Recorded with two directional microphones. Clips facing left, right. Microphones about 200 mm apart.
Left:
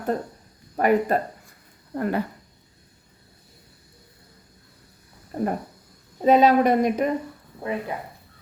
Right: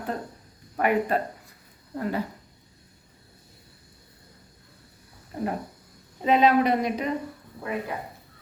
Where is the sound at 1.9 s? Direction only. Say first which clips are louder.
Left 4 dB; 55° left (ahead or behind).